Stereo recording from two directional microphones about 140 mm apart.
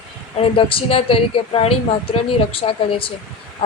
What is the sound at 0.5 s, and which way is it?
A woman's voice, 40° left (ahead or behind).